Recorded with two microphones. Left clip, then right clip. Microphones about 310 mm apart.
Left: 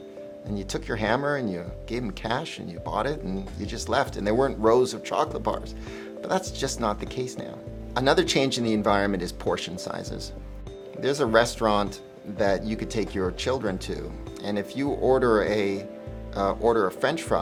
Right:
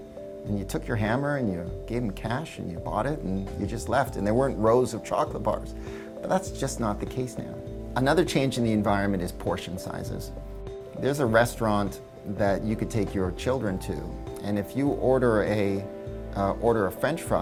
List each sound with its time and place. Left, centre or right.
0.7 s speech: right
11.0 s speech: right